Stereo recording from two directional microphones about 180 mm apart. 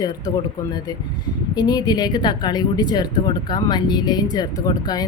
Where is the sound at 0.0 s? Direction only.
20° left (ahead or behind).